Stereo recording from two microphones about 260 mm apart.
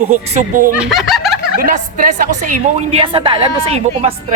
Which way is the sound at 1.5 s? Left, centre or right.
Right.